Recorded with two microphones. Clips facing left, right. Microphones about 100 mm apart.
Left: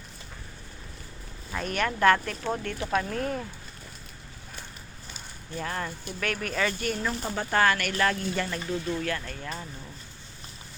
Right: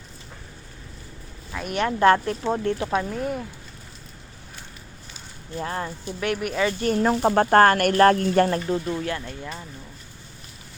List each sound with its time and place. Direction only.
1.7 s speech: 25° right (ahead or behind)
3.0 s speech: 10° right (ahead or behind)
5.5 s speech: 25° right (ahead or behind)
6.7 s speech: 40° right (ahead or behind)
8.8 s speech: 20° right (ahead or behind)